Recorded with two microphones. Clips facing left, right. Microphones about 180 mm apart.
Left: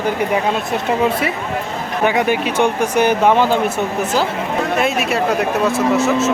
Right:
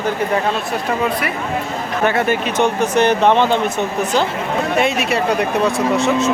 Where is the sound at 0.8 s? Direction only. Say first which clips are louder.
Left 3 dB; 25° left (ahead or behind).